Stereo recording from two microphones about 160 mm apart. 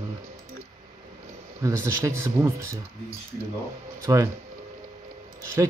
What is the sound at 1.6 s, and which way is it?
Speech, 20° right (ahead or behind).